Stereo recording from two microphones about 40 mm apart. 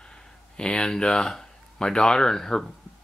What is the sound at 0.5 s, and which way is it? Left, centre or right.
Speech, left.